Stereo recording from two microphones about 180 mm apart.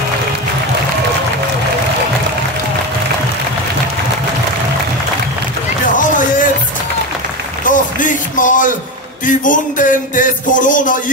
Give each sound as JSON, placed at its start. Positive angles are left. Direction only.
{"t": 5.9, "sound": "music", "side_deg": 45}
{"t": 7.6, "sound": "a sound", "side_deg": 45}
{"t": 9.2, "sound": "a man's voice", "side_deg": 45}